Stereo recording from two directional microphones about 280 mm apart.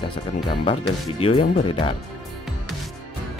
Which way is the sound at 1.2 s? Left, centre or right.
Left.